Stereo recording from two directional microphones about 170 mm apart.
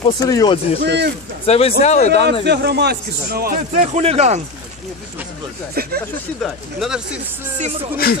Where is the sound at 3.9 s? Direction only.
40° right (ahead or behind).